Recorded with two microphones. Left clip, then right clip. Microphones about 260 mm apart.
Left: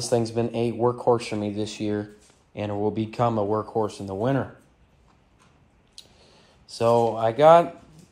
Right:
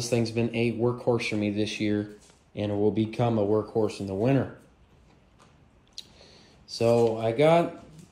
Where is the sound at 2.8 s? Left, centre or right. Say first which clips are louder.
Left 2 dB; centre.